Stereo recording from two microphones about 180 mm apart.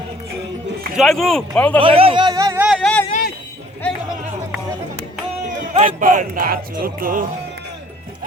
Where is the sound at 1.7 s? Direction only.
30° right (ahead or behind).